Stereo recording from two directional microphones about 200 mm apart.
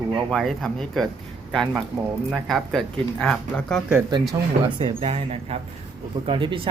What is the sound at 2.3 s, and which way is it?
Speech, centre (ahead or behind).